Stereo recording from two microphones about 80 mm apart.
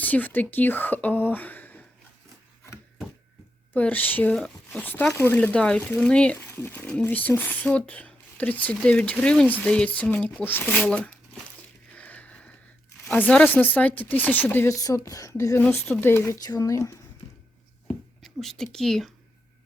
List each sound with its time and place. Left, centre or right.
0.0 s speech: left
3.8 s speech: centre
4.4 s speech: centre
4.8 s speech: left
6.5 s a sound: left
6.7 s speech: centre
10.7 s speech: centre
11.9 s a sound: centre
13.1 s speech: centre
14.8 s speech: left
15.7 s speech: left
16.4 s speech: left
17.8 s a sound: centre